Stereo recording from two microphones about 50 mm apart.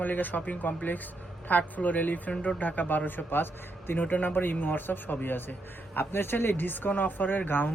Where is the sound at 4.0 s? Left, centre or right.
Left.